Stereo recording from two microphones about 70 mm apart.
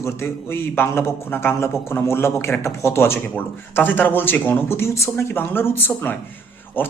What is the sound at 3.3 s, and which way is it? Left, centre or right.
Speech, left.